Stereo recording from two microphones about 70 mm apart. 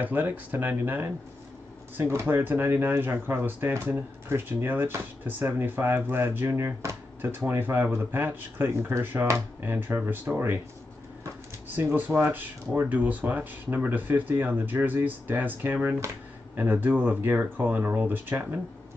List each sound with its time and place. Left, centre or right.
0.0 s speech: right
11.7 s speech: right